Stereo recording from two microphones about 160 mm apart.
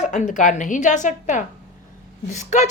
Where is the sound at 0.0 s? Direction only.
50° left (ahead or behind).